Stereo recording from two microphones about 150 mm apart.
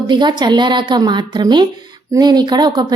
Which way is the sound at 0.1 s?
30° right (ahead or behind).